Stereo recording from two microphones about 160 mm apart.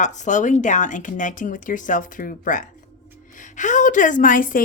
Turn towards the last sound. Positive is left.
turn(degrees=60)  # may be behind; listen again after turning